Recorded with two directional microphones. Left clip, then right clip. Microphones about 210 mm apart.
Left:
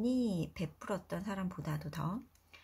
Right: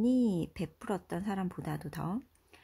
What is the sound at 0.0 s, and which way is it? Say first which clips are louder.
Speech: right 5 dB; 45° right (ahead or behind).